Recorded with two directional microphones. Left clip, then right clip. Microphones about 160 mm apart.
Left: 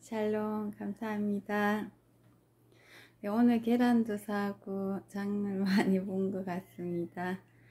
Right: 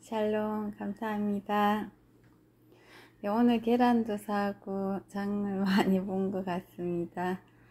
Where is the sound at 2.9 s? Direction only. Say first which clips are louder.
Right 4 dB; 10° left (ahead or behind).